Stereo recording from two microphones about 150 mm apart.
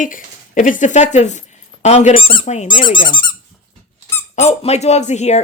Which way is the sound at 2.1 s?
40° left (ahead or behind).